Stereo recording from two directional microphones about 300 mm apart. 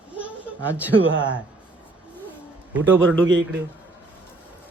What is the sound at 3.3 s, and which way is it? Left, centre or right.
Speech, right.